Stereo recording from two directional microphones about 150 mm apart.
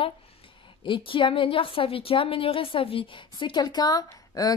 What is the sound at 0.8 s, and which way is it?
A woman's voice, 35° left (ahead or behind).